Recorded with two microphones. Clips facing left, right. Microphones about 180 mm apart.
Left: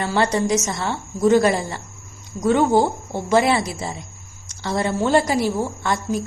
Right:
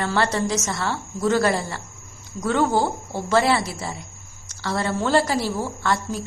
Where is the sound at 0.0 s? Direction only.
20° left (ahead or behind).